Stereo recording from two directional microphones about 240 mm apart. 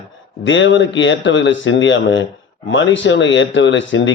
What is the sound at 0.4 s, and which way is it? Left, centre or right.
Speech, left.